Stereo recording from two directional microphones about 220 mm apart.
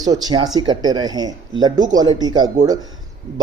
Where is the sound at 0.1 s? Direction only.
15° right (ahead or behind).